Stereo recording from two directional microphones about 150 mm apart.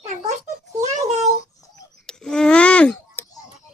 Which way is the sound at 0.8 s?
50° right (ahead or behind).